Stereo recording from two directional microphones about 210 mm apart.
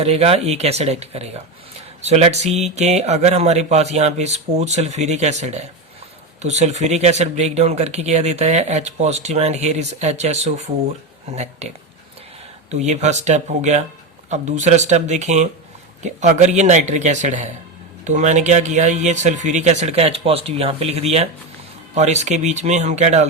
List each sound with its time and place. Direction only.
0.0 s speech: 30° right (ahead or behind)
12.7 s speech: 35° right (ahead or behind)